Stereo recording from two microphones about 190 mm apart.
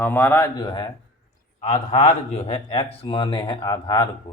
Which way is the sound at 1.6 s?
40° left (ahead or behind).